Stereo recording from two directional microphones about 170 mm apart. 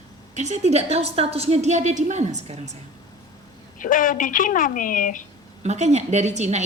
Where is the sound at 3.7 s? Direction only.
50° left (ahead or behind).